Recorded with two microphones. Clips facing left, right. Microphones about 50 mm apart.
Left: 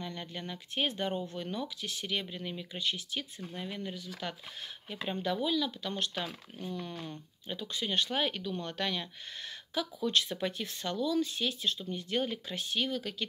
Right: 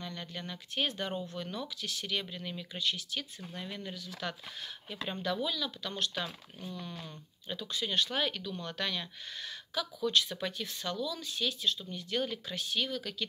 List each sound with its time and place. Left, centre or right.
0.0 s speech: centre
7.4 s speech: left